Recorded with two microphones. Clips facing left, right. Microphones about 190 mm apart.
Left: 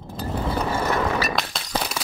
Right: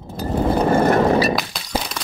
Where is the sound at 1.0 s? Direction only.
35° right (ahead or behind).